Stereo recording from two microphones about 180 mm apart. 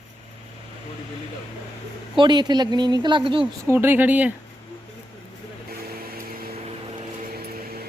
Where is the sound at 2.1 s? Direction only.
25° right (ahead or behind).